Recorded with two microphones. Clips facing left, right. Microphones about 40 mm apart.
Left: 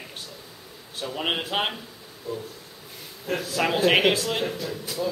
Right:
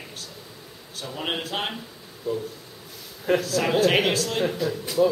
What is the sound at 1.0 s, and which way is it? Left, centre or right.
Speech, centre.